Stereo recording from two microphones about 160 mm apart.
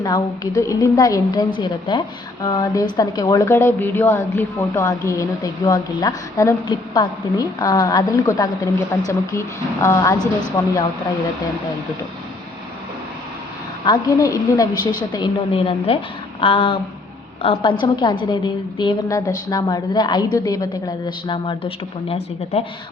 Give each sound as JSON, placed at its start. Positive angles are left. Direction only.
{"t": 0.0, "sound": "a woman's voice", "side_deg": 20}
{"t": 13.8, "sound": "a woman's voice", "side_deg": 25}